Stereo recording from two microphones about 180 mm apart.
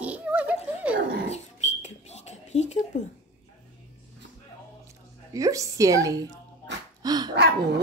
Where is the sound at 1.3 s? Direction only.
40° left (ahead or behind).